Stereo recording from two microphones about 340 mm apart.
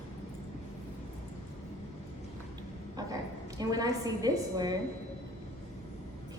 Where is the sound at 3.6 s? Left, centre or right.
Centre.